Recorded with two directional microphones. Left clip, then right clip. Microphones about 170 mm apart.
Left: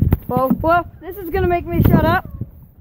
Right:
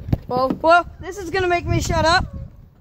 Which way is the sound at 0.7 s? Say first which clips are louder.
Right 2 dB; 20° left (ahead or behind).